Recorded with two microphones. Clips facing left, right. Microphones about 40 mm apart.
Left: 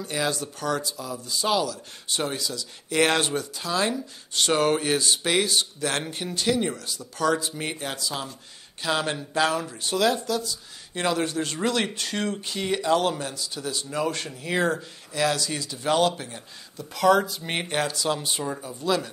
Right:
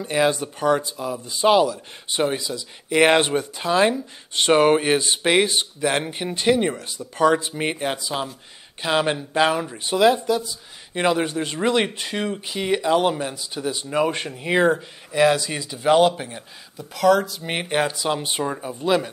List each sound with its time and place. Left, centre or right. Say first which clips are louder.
0.0 s speech: right 7 dB; right
16.7 s speech: right 2 dB; centre
17.4 s speech: right 4 dB; centre; by 19.0 s right